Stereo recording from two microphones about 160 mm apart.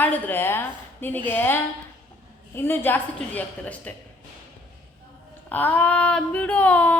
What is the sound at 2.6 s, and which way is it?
Speech, 15° left (ahead or behind).